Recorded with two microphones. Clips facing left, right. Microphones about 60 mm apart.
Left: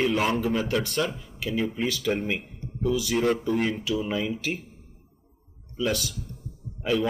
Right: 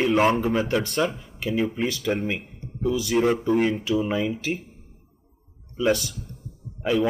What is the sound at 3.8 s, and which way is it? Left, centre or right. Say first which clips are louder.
Speech: right 4 dB; right.